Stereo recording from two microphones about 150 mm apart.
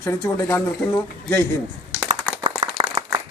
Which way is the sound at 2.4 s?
40° right (ahead or behind).